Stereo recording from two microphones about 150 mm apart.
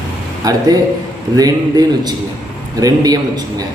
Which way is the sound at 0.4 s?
25° right (ahead or behind).